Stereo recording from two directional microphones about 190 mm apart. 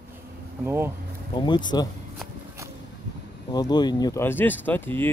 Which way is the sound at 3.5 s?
20° left (ahead or behind).